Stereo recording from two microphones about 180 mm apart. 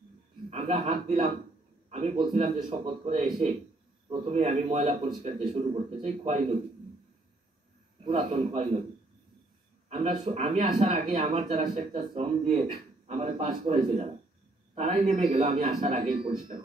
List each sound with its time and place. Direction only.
0.5 s a man's voice: 40° right (ahead or behind)
5.5 s a man's voice: 35° right (ahead or behind)
8.0 s a man's voice: 35° right (ahead or behind)
9.8 s a man's voice: 45° right (ahead or behind)
15.3 s a man's voice: 35° right (ahead or behind)